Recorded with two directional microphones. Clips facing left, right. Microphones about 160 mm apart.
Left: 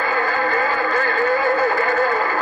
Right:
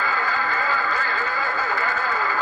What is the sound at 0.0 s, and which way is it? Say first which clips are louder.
Speech: left 5 dB; 55° left (ahead or behind).